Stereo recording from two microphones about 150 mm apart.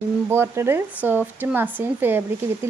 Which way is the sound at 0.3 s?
15° right (ahead or behind).